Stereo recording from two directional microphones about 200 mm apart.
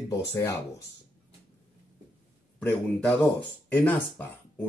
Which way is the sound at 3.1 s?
5° left (ahead or behind).